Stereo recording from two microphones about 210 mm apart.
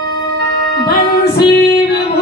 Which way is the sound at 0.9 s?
50° left (ahead or behind).